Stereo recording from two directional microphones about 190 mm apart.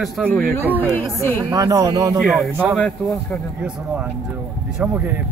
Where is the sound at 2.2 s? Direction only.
Centre (ahead or behind).